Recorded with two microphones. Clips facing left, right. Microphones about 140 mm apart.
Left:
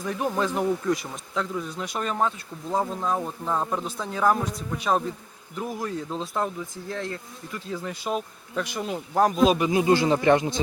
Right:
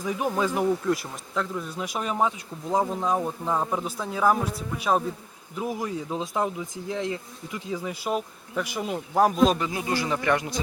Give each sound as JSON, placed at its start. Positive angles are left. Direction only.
{"t": 0.0, "sound": "speech", "side_deg": -5}
{"t": 9.6, "sound": "speech", "side_deg": 20}